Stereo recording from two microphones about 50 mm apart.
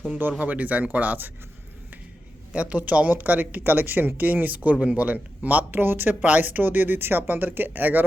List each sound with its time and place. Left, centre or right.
0.3 s speech: right
2.5 s speech: right
3.6 s speech: right